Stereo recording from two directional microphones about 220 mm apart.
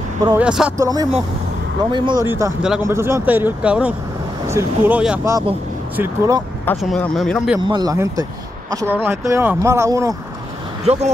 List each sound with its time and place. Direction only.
0.4 s speech: 5° right (ahead or behind)
0.7 s speech: 15° right (ahead or behind)
6.6 s speech: 5° left (ahead or behind)
7.6 s speech: 20° right (ahead or behind)